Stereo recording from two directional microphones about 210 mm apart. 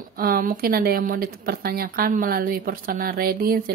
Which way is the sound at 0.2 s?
45° right (ahead or behind).